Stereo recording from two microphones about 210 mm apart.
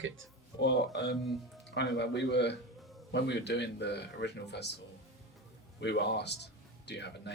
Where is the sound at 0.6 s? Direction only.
55° left (ahead or behind).